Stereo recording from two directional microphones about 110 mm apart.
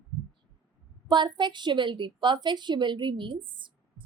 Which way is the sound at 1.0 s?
45° right (ahead or behind).